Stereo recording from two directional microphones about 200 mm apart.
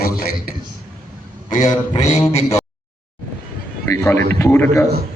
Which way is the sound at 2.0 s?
35° left (ahead or behind).